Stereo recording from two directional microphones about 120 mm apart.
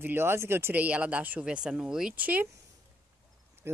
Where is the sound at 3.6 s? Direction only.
20° right (ahead or behind).